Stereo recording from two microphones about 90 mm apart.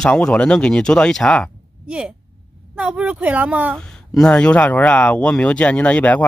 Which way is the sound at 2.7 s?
15° right (ahead or behind).